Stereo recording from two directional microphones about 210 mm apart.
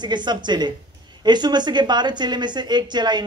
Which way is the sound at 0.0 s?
20° right (ahead or behind).